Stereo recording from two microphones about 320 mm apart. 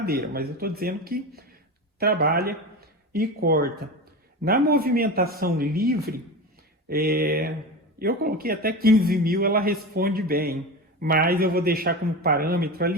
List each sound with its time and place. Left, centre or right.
0.0 s a man's voice: right